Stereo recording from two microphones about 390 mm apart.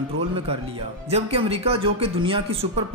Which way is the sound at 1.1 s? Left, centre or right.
Centre.